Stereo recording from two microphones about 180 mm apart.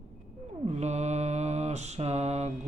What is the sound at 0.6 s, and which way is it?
Mantra, 40° right (ahead or behind).